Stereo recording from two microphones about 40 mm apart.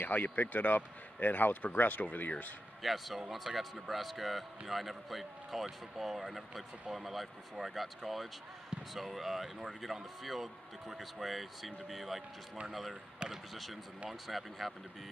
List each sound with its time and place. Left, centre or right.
0.0 s speech: left
2.8 s a man's voice: centre
13.3 s a man's voice: centre